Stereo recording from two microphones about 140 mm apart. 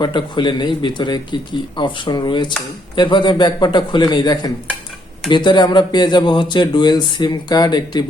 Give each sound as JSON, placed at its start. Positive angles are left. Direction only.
{"t": 0.0, "sound": "speech", "side_deg": 35}